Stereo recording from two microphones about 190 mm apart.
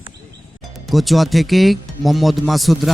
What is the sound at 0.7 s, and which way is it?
Speech, centre (ahead or behind).